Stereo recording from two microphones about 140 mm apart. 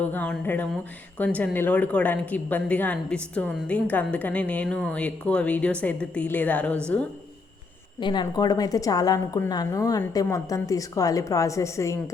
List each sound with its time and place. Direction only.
0.0 s a woman's voice: 10° left (ahead or behind)
7.9 s a woman's voice: 35° left (ahead or behind)